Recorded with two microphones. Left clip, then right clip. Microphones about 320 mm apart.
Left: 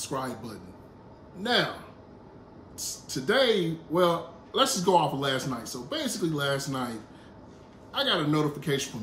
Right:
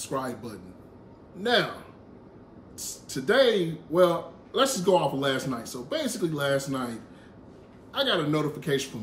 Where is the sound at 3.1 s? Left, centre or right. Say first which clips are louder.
Right 2 dB; centre.